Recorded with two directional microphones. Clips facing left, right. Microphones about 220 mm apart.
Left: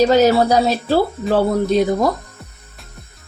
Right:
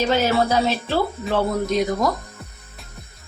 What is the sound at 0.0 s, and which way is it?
Speech, 40° left (ahead or behind).